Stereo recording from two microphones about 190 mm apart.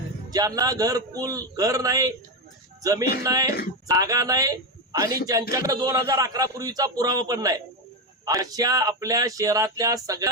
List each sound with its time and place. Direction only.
0.3 s a man's voice: 20° right (ahead or behind)